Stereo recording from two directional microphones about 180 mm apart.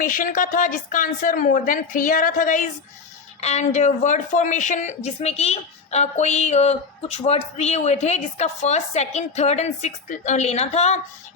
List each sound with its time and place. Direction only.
0.0 s a woman's voice: 45° left (ahead or behind)